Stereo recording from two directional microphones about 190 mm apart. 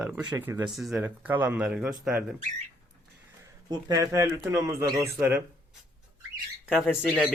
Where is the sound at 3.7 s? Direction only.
20° right (ahead or behind).